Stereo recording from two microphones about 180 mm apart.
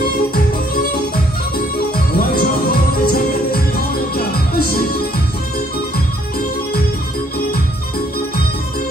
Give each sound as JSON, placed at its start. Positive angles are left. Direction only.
{"t": 2.1, "sound": "music", "side_deg": 55}